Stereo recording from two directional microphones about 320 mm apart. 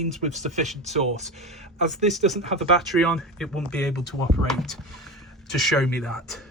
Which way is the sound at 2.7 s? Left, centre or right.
Centre.